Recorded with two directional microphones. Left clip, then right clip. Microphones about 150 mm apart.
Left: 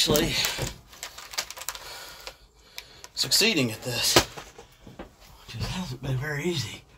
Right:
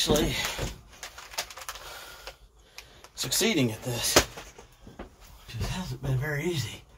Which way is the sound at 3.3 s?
10° left (ahead or behind).